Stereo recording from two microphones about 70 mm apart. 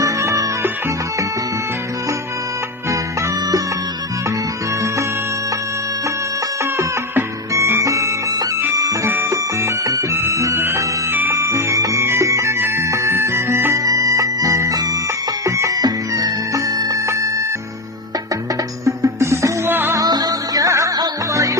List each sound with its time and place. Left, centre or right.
0.0 s music: right
2.9 s music: right
6.6 s music: right
9.3 s music: right
11.1 s music: right
11.3 s music: right
13.7 s music: right
14.7 s music: right
15.4 s music: right
17.1 s music: right
18.9 s music: right
19.7 s music: right
20.0 s music: right